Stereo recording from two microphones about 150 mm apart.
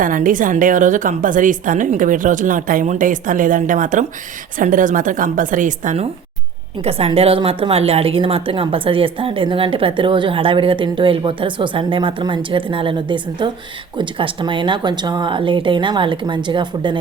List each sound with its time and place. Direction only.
0.0 s a woman's voice: 65° right (ahead or behind)
6.8 s a woman's voice: 40° right (ahead or behind)